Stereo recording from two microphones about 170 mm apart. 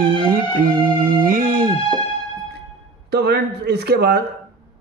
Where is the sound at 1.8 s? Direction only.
30° left (ahead or behind).